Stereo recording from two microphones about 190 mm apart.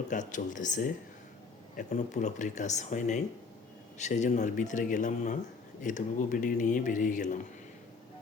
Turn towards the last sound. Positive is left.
turn(degrees=40)  # may be behind; listen again after turning